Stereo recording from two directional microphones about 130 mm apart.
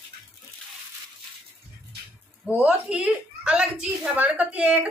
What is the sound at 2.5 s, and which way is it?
A woman's voice, 10° right (ahead or behind).